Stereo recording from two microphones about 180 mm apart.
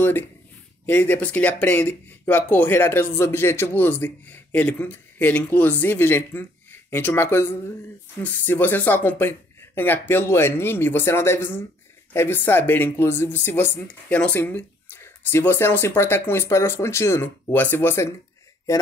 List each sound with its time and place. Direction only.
0.8 s speech: 10° left (ahead or behind)